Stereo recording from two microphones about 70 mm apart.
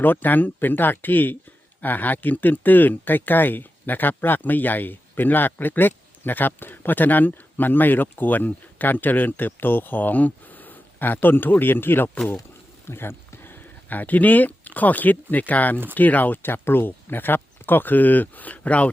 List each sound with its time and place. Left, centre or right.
0.0 s speech: left